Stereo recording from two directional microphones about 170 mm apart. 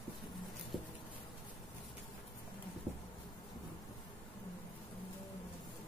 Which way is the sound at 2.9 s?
5° right (ahead or behind).